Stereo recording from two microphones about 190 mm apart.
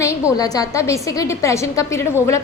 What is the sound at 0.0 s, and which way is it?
A child's voice, 15° left (ahead or behind).